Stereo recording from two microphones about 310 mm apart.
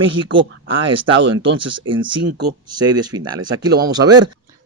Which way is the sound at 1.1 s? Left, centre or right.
Right.